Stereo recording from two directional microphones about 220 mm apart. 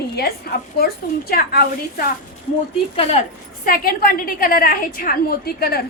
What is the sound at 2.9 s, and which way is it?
A woman's voice, 30° left (ahead or behind).